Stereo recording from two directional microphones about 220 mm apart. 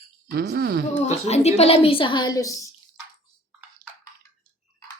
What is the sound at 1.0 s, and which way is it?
A woman's voice, 30° left (ahead or behind).